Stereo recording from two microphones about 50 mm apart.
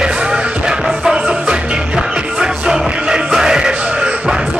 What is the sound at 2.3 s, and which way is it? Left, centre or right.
Music, centre.